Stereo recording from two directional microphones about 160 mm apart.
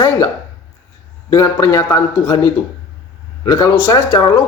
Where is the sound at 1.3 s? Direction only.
20° left (ahead or behind).